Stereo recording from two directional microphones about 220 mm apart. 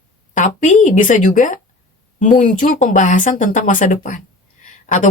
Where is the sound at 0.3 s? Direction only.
35° left (ahead or behind).